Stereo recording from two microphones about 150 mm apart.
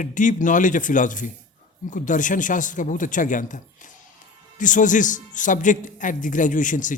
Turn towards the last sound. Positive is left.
turn(degrees=60)  # may be behind; listen again after turning